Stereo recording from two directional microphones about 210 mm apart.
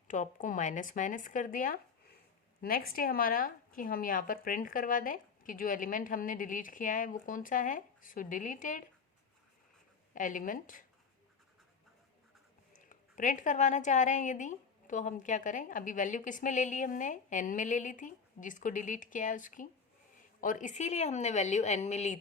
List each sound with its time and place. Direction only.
0.1 s a woman's voice: 40° left (ahead or behind)
10.2 s a woman's voice: 40° left (ahead or behind)
12.7 s a woman's voice: 40° left (ahead or behind)